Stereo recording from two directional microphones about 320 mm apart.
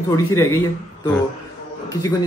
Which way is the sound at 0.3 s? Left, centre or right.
Centre.